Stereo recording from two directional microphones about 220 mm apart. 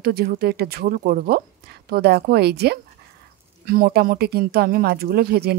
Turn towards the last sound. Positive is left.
turn(degrees=-45)  # may be behind; listen again after turning